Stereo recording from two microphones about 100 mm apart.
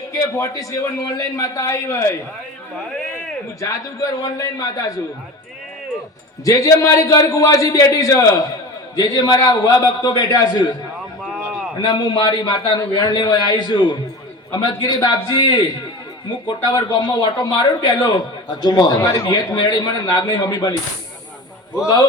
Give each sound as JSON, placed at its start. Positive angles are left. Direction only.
{"t": 0.1, "sound": "a man's voice", "side_deg": 35}
{"t": 4.2, "sound": "a man's voice", "side_deg": 35}
{"t": 6.4, "sound": "a man's voice", "side_deg": 35}
{"t": 9.0, "sound": "a man's voice", "side_deg": 40}
{"t": 11.2, "sound": "a sound", "side_deg": -10}
{"t": 11.8, "sound": "a man's voice", "side_deg": 45}
{"t": 16.7, "sound": "a man's voice", "side_deg": 45}
{"t": 18.9, "sound": "a man's voice", "side_deg": 25}
{"t": 19.3, "sound": "a man's voice", "side_deg": 45}